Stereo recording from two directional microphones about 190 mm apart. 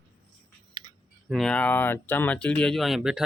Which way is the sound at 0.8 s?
20° right (ahead or behind).